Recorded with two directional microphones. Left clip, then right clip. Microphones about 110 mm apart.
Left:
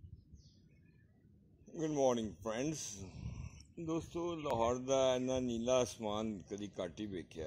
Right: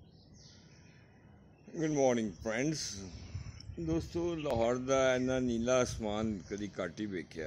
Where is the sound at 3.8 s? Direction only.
55° right (ahead or behind).